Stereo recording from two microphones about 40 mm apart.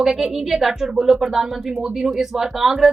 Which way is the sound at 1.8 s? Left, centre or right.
Right.